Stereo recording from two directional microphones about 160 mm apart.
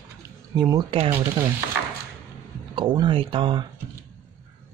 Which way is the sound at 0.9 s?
35° right (ahead or behind).